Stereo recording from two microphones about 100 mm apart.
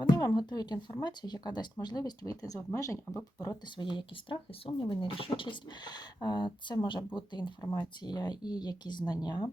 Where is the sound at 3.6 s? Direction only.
50° left (ahead or behind).